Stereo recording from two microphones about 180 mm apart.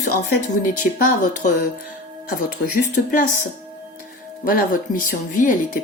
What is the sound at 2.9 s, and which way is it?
Speech, 50° left (ahead or behind).